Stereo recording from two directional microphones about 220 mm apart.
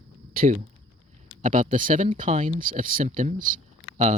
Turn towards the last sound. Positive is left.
turn(degrees=-30)  # may be behind; listen again after turning